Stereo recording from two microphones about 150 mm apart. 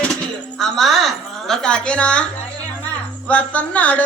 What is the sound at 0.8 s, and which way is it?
Speech, centre (ahead or behind).